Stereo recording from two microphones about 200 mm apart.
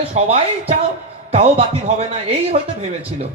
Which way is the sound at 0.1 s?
30° right (ahead or behind).